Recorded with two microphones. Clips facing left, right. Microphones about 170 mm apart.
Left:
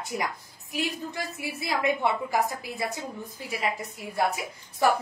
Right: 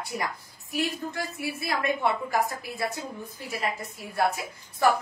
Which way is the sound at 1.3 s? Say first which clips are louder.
Left 1 dB; 20° left (ahead or behind).